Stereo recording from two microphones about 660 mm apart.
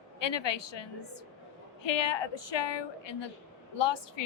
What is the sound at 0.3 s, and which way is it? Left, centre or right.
A woman's voice, left.